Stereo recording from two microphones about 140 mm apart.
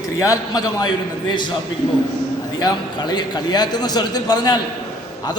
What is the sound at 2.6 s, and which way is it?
A man's voice, 30° left (ahead or behind).